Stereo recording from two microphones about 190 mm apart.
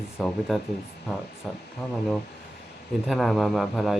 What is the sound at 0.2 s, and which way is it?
Speech, centre (ahead or behind).